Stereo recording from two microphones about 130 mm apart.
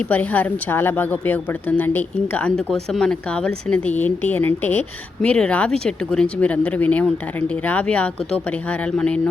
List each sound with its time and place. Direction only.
0.1 s a woman's voice: 15° left (ahead or behind)